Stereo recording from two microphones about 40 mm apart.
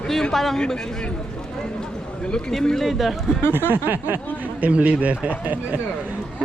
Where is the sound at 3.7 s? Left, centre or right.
Right.